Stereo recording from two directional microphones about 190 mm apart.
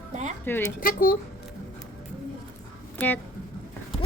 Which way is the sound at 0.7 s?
50° left (ahead or behind).